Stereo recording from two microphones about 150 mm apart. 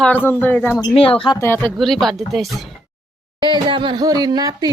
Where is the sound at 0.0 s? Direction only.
10° left (ahead or behind).